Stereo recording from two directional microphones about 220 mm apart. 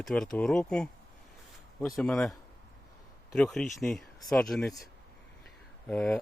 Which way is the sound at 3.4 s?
Centre (ahead or behind).